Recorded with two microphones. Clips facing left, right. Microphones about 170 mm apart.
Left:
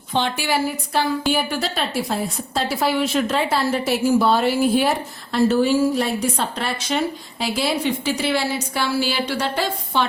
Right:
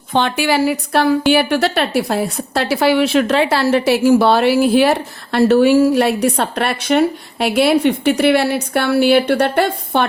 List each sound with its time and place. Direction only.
0.1 s a woman's voice: 60° right (ahead or behind)